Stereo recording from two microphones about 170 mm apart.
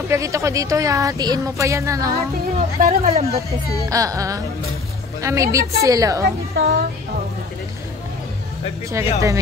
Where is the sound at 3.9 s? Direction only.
20° right (ahead or behind).